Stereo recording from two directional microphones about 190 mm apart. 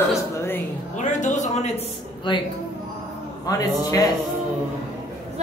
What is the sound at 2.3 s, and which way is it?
A man's voice, 25° left (ahead or behind).